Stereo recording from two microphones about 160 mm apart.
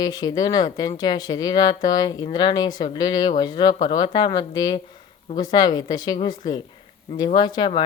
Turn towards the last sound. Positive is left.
turn(degrees=25)  # may be behind; listen again after turning